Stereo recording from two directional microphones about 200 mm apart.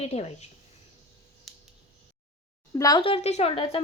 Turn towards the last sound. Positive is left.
turn(degrees=30)  # may be behind; listen again after turning